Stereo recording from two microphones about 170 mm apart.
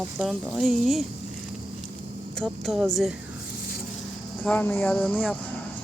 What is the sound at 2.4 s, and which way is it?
Speech, centre (ahead or behind).